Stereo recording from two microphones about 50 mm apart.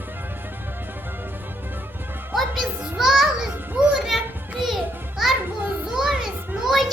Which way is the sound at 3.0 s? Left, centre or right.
Centre.